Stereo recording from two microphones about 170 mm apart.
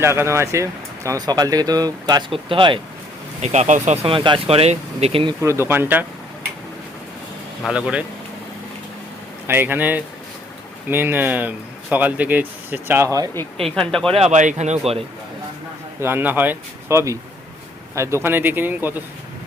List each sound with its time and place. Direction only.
0.0 s speech: 15° right (ahead or behind)
3.4 s speech: 40° right (ahead or behind)
5.4 s speech: 15° right (ahead or behind)
7.6 s speech: 5° right (ahead or behind)
9.5 s speech: 10° right (ahead or behind)
13.7 s speech: 5° left (ahead or behind)
14.1 s speech: 40° right (ahead or behind)
16.0 s speech: 15° right (ahead or behind)